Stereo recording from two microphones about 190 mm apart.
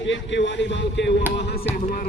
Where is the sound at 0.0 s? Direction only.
75° left (ahead or behind).